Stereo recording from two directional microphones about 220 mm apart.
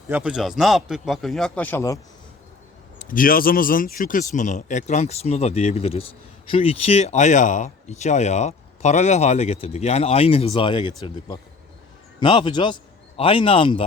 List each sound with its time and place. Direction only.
0.1 s speech: 5° right (ahead or behind); by 2.0 s 10° left (ahead or behind)
3.0 s a man's voice: 40° left (ahead or behind)